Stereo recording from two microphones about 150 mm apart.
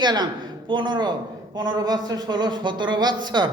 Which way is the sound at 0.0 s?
30° right (ahead or behind).